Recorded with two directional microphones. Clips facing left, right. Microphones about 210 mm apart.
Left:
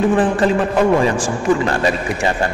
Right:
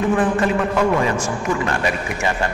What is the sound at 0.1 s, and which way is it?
A man's voice, 30° left (ahead or behind).